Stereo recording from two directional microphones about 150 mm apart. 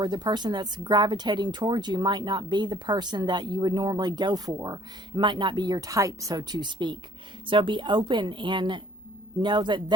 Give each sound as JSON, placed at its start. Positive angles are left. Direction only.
{"t": 0.0, "sound": "a woman's voice", "side_deg": -30}